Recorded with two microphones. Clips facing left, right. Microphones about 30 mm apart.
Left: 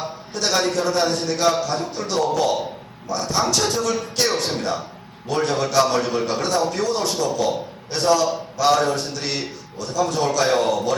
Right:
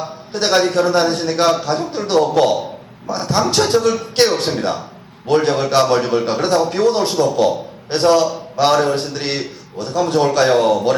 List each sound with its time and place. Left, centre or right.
0.3 s a man's voice: right
10.2 s a man's voice: right